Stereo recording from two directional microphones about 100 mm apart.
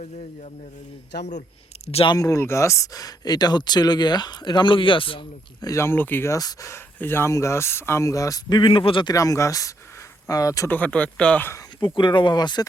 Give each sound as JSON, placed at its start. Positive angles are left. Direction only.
{"t": 2.1, "sound": "speech", "side_deg": 35}
{"t": 5.6, "sound": "speech", "side_deg": 25}
{"t": 6.3, "sound": "speech", "side_deg": 35}
{"t": 9.0, "sound": "speech", "side_deg": 35}
{"t": 10.7, "sound": "speech", "side_deg": 15}
{"t": 11.9, "sound": "speech", "side_deg": 50}